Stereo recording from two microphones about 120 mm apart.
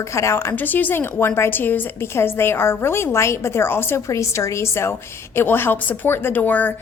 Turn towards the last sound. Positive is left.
turn(degrees=15)  # may be behind; listen again after turning